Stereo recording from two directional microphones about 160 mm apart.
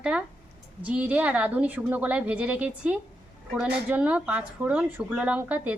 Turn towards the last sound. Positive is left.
turn(degrees=-10)  # may be behind; listen again after turning